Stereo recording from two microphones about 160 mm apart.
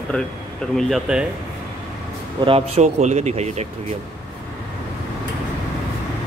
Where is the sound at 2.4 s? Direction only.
40° right (ahead or behind).